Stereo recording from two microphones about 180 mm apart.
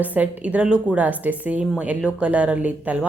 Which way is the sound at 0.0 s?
10° right (ahead or behind).